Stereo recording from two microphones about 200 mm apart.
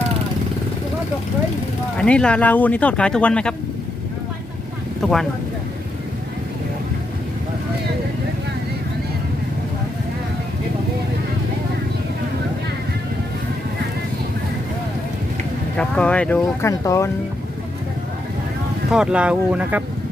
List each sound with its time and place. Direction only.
2.0 s speech: 5° left (ahead or behind)
15.8 s speech: 5° left (ahead or behind)
18.9 s speech: 5° right (ahead or behind)